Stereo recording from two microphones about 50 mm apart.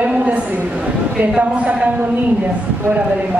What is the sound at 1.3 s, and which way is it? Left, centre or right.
A man's voice, right.